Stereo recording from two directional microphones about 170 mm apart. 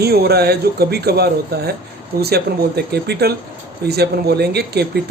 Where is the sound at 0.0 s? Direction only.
65° right (ahead or behind).